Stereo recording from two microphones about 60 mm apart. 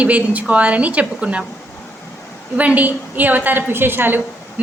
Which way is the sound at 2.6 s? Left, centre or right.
Right.